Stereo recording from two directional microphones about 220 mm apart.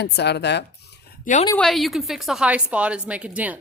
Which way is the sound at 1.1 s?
35° left (ahead or behind).